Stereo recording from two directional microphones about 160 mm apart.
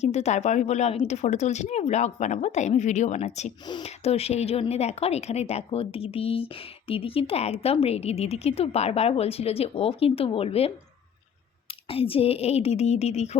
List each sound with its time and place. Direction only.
0.0 s a woman's voice: 45° left (ahead or behind)
11.9 s speech: 35° left (ahead or behind)